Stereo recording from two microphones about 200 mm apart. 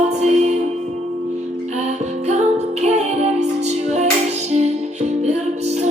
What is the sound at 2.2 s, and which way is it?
Music, 35° right (ahead or behind).